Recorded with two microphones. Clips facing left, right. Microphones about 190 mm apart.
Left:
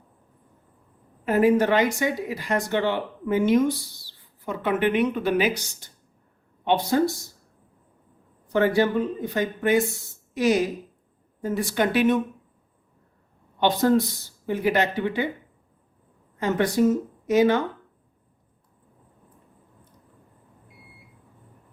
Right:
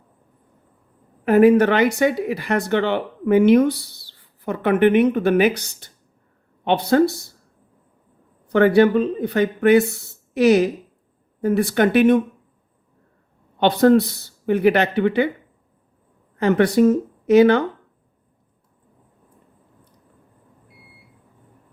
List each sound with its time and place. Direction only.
1.2 s speech: 65° right (ahead or behind)
8.4 s speech: 65° right (ahead or behind)
13.6 s speech: 65° right (ahead or behind)
16.4 s speech: 65° right (ahead or behind)